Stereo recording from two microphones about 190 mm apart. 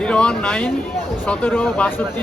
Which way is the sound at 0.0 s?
5° left (ahead or behind).